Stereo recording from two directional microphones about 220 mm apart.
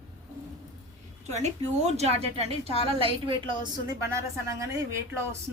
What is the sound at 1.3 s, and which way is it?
A woman's voice, 30° right (ahead or behind).